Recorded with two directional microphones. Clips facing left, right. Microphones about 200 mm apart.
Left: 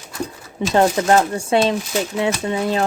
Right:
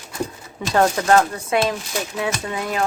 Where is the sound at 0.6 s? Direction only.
25° left (ahead or behind).